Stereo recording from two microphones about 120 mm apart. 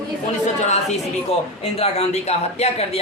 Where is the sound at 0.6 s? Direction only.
70° left (ahead or behind).